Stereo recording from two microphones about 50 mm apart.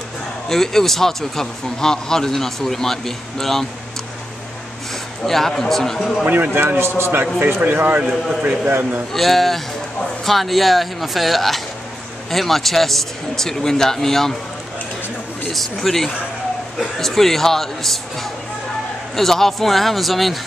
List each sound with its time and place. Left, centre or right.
0.5 s speech: centre
5.2 s speech: centre
6.2 s a man's voice: right
9.1 s speech: centre
15.5 s speech: centre
19.1 s speech: centre